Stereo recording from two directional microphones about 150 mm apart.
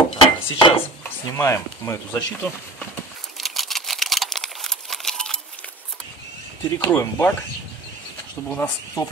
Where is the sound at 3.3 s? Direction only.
Centre (ahead or behind).